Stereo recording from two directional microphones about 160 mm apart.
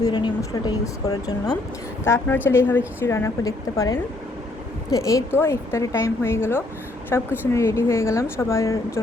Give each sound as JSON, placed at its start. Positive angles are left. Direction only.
{"t": 0.0, "sound": "a woman's voice", "side_deg": 25}